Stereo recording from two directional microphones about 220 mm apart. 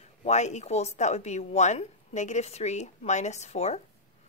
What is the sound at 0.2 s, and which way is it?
A woman's voice, 30° left (ahead or behind).